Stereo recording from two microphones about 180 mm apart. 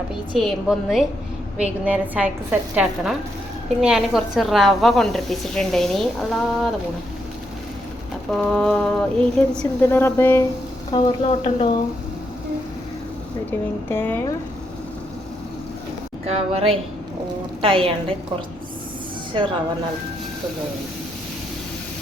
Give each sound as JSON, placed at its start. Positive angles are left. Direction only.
{"t": 0.3, "sound": "a woman's voice", "side_deg": 0}
{"t": 8.3, "sound": "a woman's voice", "side_deg": 5}
{"t": 10.9, "sound": "speech", "side_deg": 30}
{"t": 13.8, "sound": "speech", "side_deg": 10}
{"t": 16.2, "sound": "a woman's voice", "side_deg": -35}